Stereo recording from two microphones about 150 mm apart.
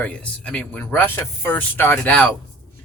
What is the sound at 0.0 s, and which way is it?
Speech, 10° left (ahead or behind).